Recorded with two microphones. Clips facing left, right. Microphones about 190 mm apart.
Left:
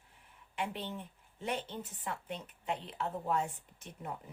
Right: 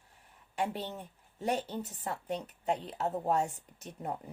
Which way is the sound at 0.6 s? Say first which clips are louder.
Right 4 dB; 40° right (ahead or behind).